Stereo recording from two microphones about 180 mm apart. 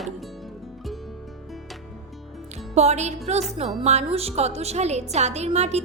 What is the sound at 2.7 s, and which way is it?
A woman's voice, 40° right (ahead or behind).